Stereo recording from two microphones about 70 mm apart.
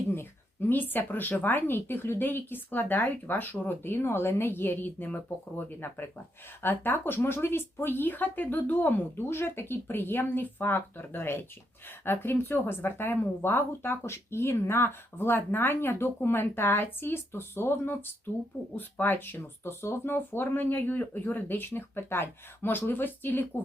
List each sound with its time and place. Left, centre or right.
0.7 s a woman's voice: left